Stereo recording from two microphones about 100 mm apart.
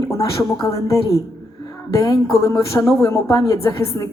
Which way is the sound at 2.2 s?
30° left (ahead or behind).